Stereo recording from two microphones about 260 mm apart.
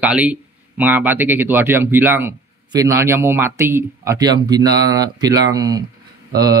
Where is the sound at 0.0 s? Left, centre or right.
Centre.